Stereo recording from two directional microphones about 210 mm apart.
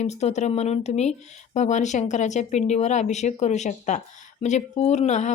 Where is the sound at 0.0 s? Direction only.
30° left (ahead or behind).